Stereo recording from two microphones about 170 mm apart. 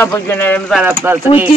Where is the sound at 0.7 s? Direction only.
10° right (ahead or behind).